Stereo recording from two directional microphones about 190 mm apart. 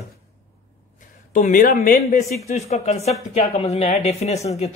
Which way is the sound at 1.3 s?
45° left (ahead or behind).